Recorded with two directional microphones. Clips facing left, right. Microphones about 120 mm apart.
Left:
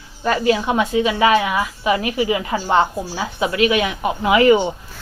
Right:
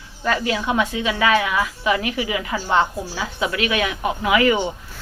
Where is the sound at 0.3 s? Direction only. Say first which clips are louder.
Left 4 dB; 25° left (ahead or behind).